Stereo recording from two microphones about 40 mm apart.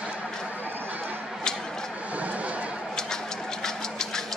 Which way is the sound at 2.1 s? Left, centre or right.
Right.